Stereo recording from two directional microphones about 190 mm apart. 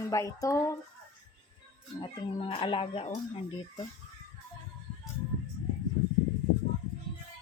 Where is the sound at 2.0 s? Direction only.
30° left (ahead or behind).